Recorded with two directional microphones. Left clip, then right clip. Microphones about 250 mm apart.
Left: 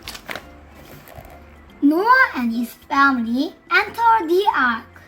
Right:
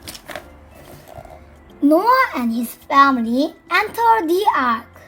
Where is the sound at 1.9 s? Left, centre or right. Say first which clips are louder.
Right 1 dB; right.